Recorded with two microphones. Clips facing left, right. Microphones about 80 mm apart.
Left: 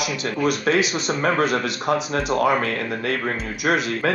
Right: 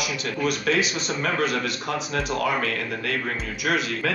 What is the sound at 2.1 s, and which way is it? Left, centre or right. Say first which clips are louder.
Speech: left 3 dB; left.